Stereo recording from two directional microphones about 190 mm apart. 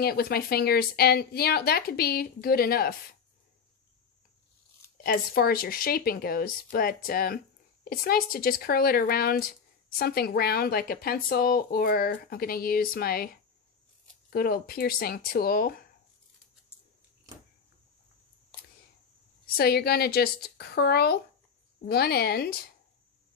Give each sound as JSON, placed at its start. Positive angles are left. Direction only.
{"t": 0.0, "sound": "speech", "side_deg": 55}
{"t": 5.0, "sound": "speech", "side_deg": 50}
{"t": 19.5, "sound": "a woman's voice", "side_deg": 55}